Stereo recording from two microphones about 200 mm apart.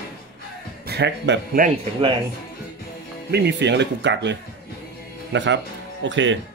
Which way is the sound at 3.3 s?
55° right (ahead or behind).